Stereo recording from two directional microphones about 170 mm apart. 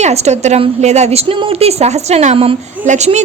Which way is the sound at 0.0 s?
40° right (ahead or behind).